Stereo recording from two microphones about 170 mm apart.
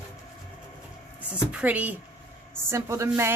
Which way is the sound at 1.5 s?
10° right (ahead or behind).